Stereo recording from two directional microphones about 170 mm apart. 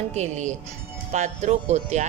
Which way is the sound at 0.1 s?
45° right (ahead or behind).